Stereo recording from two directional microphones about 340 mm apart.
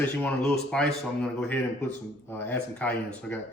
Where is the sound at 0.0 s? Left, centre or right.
Centre.